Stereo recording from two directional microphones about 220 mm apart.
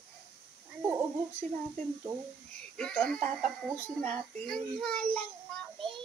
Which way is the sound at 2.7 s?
5° left (ahead or behind).